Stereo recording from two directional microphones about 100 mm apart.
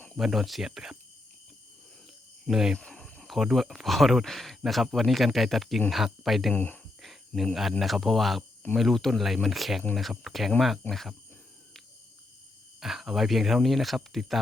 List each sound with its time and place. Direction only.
0.2 s speech: centre (ahead or behind)
2.5 s speech: 5° right (ahead or behind)
2.7 s speech: 5° left (ahead or behind)
6.5 s speech: 15° left (ahead or behind)
7.0 s cricket: centre (ahead or behind)
7.8 s speech: centre (ahead or behind)
12.8 s speech: 5° right (ahead or behind)